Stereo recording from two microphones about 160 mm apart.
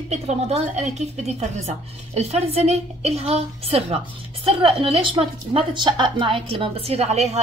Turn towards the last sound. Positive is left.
turn(degrees=-40)  # may be behind; listen again after turning